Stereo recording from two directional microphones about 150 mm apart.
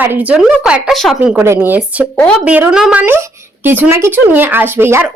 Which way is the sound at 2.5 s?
10° right (ahead or behind).